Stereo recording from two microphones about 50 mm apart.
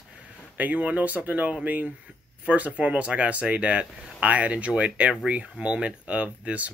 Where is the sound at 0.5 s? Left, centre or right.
Right.